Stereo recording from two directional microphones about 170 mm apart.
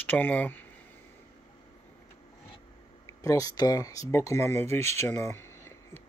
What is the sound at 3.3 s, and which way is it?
A man's voice, 20° left (ahead or behind).